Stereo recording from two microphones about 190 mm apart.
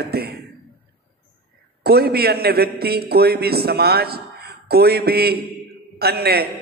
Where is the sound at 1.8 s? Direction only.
55° right (ahead or behind).